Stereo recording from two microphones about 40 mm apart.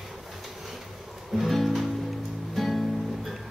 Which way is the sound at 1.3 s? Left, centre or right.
Centre.